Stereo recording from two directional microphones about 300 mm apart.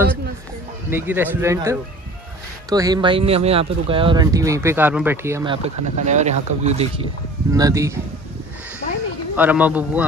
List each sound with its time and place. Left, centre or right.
0.8 s speech: centre
7.5 s speech: centre
9.4 s speech: centre